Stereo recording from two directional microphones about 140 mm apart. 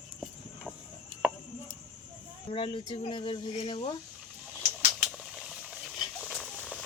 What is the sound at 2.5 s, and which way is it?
Speech, 40° left (ahead or behind).